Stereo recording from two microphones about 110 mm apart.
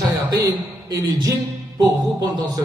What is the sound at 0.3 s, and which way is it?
A man's voice, 30° right (ahead or behind).